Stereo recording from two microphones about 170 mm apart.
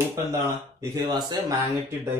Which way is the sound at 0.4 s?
15° right (ahead or behind).